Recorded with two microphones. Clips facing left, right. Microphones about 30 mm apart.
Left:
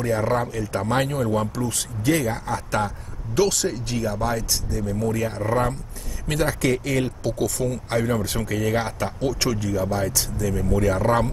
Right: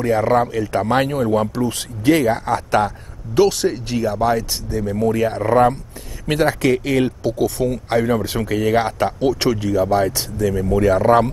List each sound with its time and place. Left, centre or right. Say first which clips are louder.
0.2 s speech: right 6 dB; centre
0.5 s speech: right 6 dB; right
1.7 s speech: right 7 dB; right
3.3 s speech: right 6 dB; centre; by 10.5 s right
10.7 s speech: right 6 dB; right